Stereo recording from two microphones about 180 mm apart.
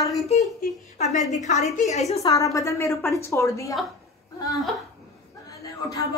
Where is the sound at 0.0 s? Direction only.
Centre (ahead or behind).